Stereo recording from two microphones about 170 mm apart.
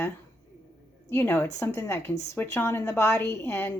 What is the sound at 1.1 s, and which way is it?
A woman's voice, 10° left (ahead or behind).